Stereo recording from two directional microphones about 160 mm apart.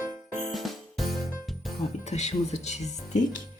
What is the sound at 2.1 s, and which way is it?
Speech, 45° left (ahead or behind).